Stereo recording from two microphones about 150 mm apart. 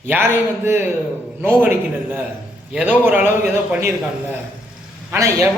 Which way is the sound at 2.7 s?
10° right (ahead or behind).